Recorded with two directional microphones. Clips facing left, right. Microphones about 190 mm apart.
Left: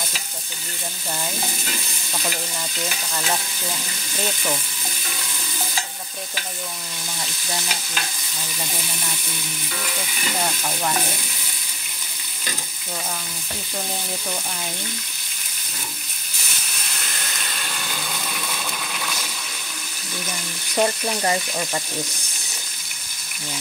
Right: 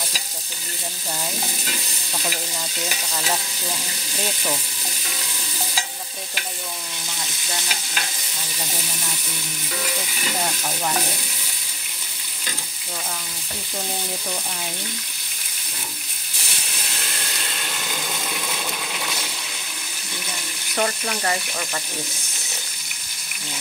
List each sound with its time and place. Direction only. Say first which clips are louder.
20.7 s frying: left 3 dB; 20° left (ahead or behind)